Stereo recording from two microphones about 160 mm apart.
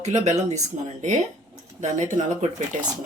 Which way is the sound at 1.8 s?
50° right (ahead or behind).